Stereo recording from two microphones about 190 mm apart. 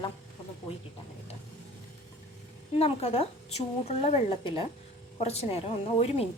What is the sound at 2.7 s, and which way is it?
A woman's voice, 30° left (ahead or behind).